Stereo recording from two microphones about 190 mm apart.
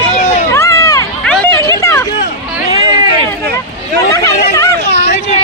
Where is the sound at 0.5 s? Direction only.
15° left (ahead or behind).